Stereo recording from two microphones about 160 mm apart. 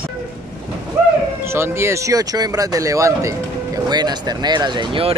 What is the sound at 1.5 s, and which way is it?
Speech, 15° right (ahead or behind).